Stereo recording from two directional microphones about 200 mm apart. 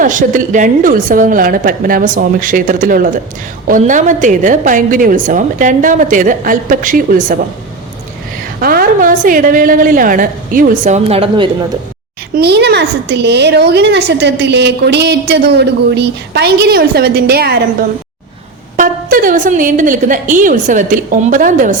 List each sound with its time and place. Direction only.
0.0 s a woman's voice: 40° right (ahead or behind)
8.6 s a woman's voice: 45° right (ahead or behind); by 11.4 s 30° right (ahead or behind)
12.3 s a woman's voice: 55° right (ahead or behind)
18.8 s a woman's voice: 45° right (ahead or behind)